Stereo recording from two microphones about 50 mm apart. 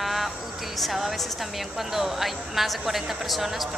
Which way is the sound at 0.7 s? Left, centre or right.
Centre.